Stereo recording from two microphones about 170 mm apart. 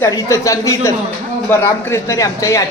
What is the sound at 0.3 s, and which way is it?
Speech, 20° left (ahead or behind).